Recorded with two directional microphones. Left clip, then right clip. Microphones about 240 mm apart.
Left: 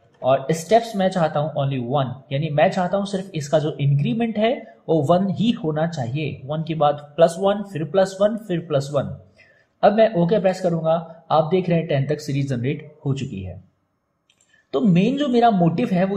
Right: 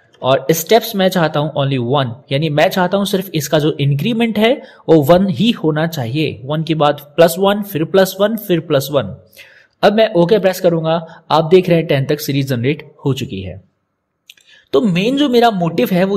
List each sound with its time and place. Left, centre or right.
0.2 s speech: right
14.7 s a man's voice: right